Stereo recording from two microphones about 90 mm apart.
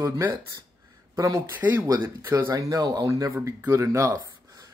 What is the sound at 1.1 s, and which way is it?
Speech, 35° right (ahead or behind).